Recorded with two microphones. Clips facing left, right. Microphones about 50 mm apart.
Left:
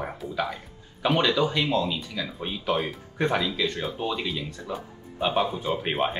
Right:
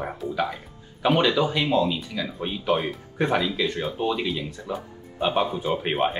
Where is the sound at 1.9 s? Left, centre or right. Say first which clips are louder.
Right 2 dB; centre.